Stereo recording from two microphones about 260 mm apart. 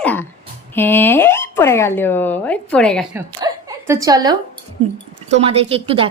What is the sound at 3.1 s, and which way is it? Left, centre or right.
A woman's voice, centre.